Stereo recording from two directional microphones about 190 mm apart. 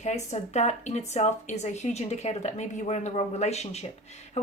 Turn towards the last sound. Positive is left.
turn(degrees=35)  # may be behind; listen again after turning